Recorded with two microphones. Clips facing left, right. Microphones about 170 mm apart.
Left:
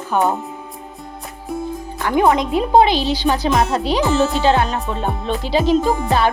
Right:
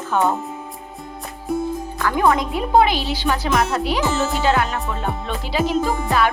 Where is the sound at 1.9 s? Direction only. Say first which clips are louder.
Left 3 dB; 20° left (ahead or behind).